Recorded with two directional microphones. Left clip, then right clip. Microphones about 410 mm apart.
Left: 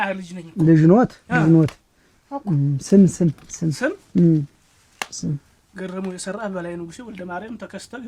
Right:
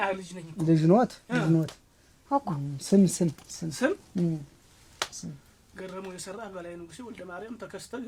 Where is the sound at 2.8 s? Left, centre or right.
Left.